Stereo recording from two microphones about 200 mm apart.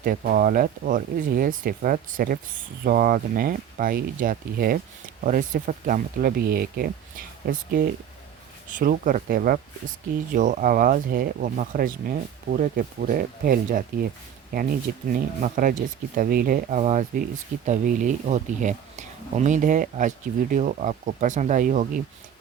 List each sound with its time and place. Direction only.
0.0 s speech: 45° right (ahead or behind)
8.8 s speech: 45° right (ahead or behind)